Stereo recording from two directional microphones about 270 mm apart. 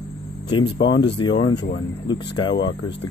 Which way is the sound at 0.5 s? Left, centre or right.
Centre.